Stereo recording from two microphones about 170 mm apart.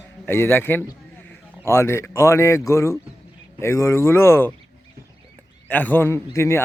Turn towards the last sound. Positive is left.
turn(degrees=15)  # may be behind; listen again after turning